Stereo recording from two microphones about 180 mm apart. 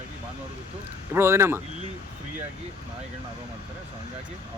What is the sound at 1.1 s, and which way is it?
Speech, 15° right (ahead or behind).